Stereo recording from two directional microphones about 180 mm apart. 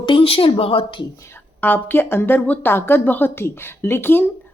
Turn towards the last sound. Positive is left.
turn(degrees=10)  # may be behind; listen again after turning